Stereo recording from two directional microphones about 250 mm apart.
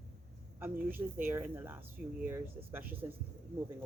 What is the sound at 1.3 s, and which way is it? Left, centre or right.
Speech, centre.